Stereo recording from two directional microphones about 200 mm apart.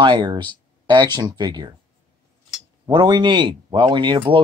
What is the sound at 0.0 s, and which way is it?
Speech, 20° right (ahead or behind).